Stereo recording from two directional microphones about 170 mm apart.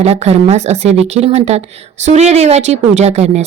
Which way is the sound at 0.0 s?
40° right (ahead or behind).